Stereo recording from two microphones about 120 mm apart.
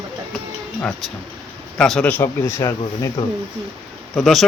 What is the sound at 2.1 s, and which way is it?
Speech, 20° left (ahead or behind).